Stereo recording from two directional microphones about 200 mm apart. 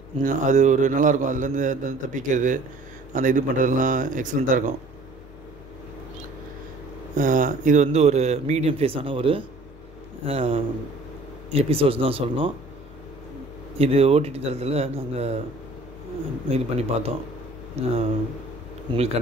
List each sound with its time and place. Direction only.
0.2 s a man's voice: 40° right (ahead or behind)
7.2 s a man's voice: 40° right (ahead or behind)
13.7 s a man's voice: 30° right (ahead or behind)
16.4 s a man's voice: 30° right (ahead or behind)